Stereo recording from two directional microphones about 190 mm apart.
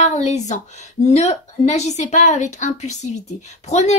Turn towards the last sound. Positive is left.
turn(degrees=35)  # may be behind; listen again after turning